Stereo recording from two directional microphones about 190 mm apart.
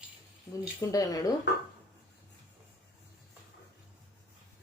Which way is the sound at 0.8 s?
20° left (ahead or behind).